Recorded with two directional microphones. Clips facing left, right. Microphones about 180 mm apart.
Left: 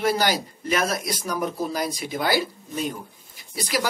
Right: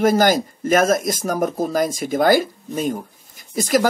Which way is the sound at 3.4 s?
45° right (ahead or behind).